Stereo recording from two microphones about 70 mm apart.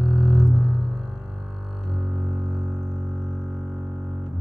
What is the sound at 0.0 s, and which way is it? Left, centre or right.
Music, centre.